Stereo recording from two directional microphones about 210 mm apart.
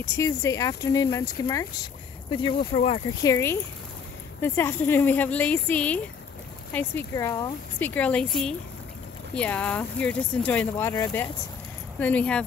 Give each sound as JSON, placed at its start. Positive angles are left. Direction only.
{"t": 0.0, "sound": "speech", "side_deg": 15}
{"t": 2.7, "sound": "speech", "side_deg": 30}
{"t": 3.3, "sound": "speech", "side_deg": 15}